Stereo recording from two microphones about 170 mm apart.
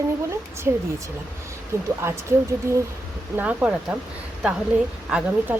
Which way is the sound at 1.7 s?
15° right (ahead or behind).